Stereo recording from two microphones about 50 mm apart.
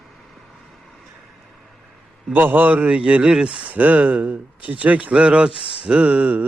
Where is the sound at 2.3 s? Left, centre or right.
Right.